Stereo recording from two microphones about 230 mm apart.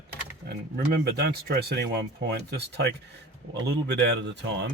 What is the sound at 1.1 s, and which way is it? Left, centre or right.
Speech, right.